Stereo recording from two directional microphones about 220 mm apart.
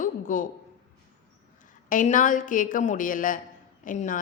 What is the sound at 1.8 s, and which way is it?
A woman's voice, 35° left (ahead or behind).